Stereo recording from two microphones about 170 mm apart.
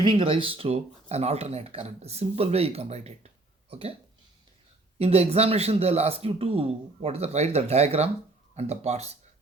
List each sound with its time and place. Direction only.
0.0 s speech: 30° right (ahead or behind)
4.9 s speech: 35° right (ahead or behind)